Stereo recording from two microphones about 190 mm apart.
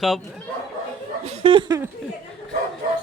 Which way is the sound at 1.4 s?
25° right (ahead or behind).